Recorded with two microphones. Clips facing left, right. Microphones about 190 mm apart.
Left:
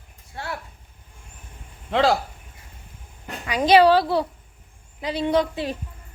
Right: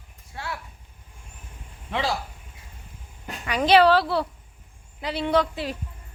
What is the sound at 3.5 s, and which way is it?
A woman's voice, 15° left (ahead or behind).